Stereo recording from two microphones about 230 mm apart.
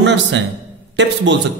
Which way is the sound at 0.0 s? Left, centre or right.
Right.